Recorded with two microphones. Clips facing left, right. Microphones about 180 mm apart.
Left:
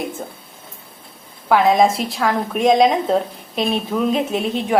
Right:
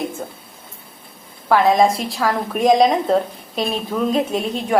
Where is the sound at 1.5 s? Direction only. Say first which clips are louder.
Even; centre (ahead or behind).